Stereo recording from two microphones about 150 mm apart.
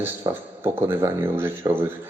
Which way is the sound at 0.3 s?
25° right (ahead or behind).